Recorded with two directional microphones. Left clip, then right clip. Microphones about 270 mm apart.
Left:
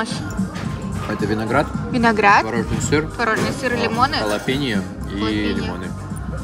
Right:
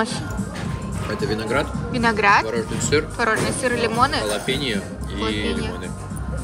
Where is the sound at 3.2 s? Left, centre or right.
Centre.